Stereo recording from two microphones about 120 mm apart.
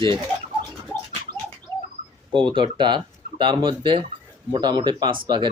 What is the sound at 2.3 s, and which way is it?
Speech, 45° right (ahead or behind).